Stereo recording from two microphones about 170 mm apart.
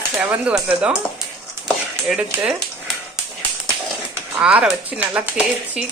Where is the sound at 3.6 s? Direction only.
15° right (ahead or behind).